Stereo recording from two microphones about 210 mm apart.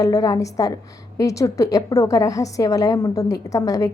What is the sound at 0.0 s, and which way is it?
A woman's voice, 15° left (ahead or behind).